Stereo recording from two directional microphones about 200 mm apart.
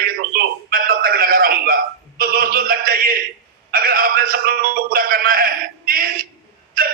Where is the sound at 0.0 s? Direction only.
45° right (ahead or behind).